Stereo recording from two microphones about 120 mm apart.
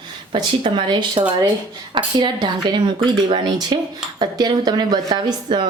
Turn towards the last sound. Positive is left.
turn(degrees=-40)  # may be behind; listen again after turning